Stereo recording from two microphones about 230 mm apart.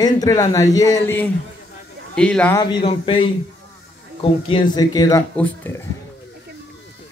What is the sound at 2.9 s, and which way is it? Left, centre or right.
A man's voice, left.